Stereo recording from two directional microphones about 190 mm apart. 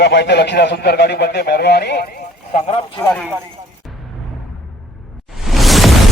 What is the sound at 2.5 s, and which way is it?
Speech, 40° left (ahead or behind).